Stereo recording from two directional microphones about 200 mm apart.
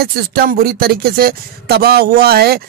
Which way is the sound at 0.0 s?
50° right (ahead or behind).